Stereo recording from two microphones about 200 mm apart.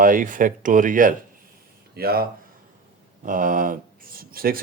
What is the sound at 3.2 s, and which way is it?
Speech, 40° right (ahead or behind).